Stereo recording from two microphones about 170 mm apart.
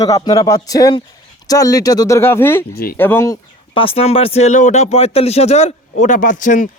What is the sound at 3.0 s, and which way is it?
Speech, 10° left (ahead or behind).